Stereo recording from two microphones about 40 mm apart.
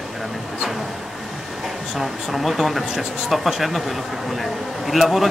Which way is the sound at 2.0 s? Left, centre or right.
Centre.